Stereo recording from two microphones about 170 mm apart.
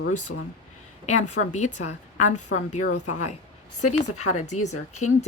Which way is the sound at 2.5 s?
90° left.